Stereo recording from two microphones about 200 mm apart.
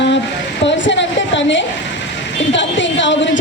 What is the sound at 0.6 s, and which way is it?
A woman's voice, 65° left (ahead or behind).